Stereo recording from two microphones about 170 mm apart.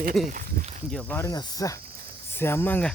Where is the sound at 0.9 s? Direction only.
10° left (ahead or behind).